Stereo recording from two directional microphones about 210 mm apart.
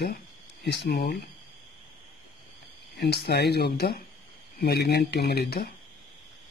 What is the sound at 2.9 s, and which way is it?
Speech, 50° left (ahead or behind).